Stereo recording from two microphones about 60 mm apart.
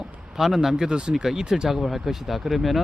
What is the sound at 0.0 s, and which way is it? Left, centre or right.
Speech, centre.